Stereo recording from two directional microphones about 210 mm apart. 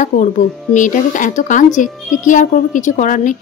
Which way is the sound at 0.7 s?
40° left (ahead or behind).